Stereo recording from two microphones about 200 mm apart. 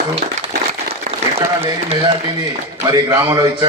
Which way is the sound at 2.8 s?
15° right (ahead or behind).